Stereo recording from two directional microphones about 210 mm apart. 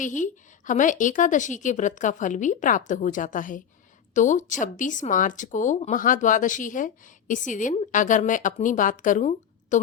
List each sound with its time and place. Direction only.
0.0 s speech: 35° left (ahead or behind)